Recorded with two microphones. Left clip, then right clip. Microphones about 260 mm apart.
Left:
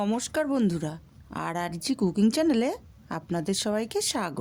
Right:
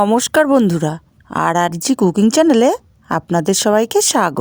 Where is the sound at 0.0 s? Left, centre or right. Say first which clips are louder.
Right 15 dB; right.